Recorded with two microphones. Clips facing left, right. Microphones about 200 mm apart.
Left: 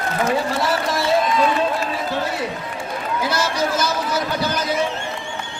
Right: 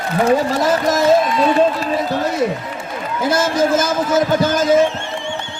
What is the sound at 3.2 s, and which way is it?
A man's voice, 50° right (ahead or behind).